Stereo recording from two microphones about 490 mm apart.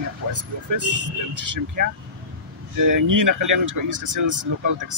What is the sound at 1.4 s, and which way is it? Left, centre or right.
Speech, right.